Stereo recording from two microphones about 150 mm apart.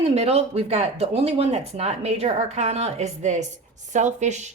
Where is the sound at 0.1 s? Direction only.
45° right (ahead or behind).